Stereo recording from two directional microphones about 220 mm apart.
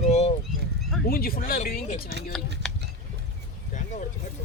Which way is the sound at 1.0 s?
40° left (ahead or behind).